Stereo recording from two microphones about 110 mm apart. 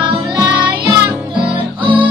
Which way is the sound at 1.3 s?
50° right (ahead or behind).